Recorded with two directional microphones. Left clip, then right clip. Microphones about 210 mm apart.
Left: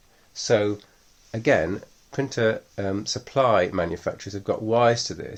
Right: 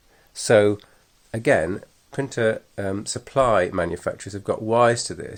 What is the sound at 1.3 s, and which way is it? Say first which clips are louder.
Speech: right 1 dB; 25° right (ahead or behind).